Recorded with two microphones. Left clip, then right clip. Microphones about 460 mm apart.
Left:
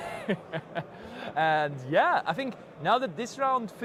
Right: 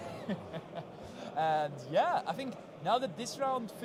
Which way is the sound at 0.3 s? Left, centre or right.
Left.